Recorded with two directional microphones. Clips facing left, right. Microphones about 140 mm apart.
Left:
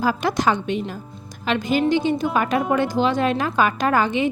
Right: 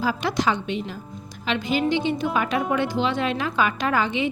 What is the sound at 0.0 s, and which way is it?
A woman's voice, 50° left (ahead or behind).